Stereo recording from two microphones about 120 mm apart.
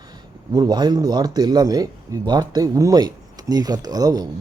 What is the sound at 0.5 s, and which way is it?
Speech, 35° right (ahead or behind).